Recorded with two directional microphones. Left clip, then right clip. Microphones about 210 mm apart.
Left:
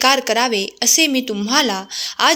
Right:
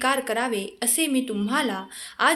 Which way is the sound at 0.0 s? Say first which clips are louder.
Left 9 dB; 30° left (ahead or behind).